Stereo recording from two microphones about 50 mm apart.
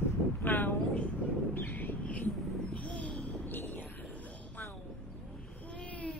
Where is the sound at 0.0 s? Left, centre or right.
Left.